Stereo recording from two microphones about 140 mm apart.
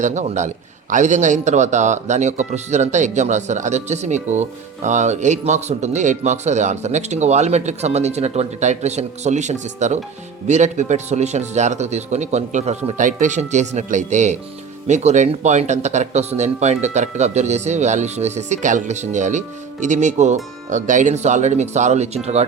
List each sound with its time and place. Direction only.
0.0 s a man's voice: 60° right (ahead or behind)